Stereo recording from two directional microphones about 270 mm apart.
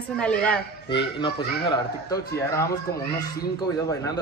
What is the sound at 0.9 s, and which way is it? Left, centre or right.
Speech, centre.